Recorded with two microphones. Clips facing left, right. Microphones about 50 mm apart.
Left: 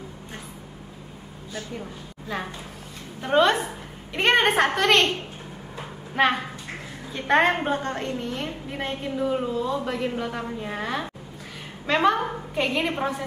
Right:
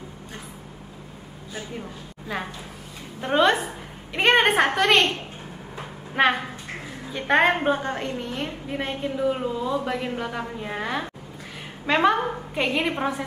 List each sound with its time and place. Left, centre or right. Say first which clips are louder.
2.3 s a woman's voice: even; centre
6.1 s a woman's voice: right 1 dB; centre